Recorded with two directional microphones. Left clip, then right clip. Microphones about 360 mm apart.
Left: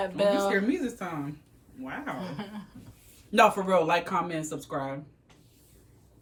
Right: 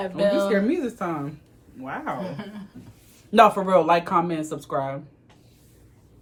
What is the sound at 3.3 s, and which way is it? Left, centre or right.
Speech, centre.